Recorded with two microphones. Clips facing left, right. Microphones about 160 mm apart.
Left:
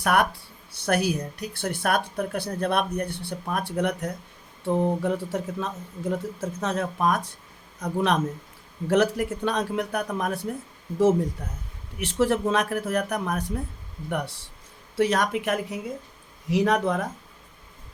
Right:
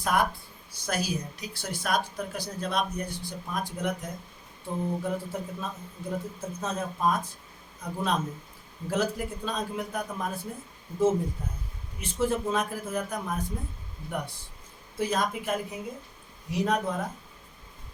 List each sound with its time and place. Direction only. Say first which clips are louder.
0.0 s a man's voice: left 4 dB; 70° left (ahead or behind)
0.9 s speech: left 7 dB; 60° left (ahead or behind)
4.6 s a man's voice: left 7 dB; 80° left
14.9 s speech: left 5 dB; 80° left